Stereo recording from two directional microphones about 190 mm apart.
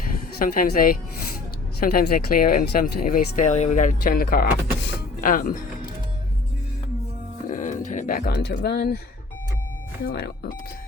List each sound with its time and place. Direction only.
0.3 s speech: 50° left (ahead or behind)
7.4 s speech: 40° left (ahead or behind); by 9.0 s 60° left (ahead or behind)
10.1 s speech: 60° left (ahead or behind)